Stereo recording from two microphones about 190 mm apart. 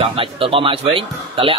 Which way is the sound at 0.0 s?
30° right (ahead or behind).